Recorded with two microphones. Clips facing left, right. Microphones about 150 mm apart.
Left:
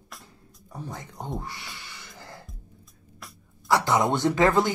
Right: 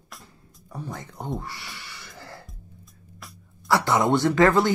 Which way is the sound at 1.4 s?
20° left (ahead or behind).